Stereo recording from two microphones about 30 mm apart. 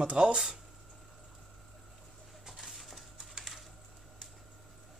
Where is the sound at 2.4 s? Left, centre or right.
Centre.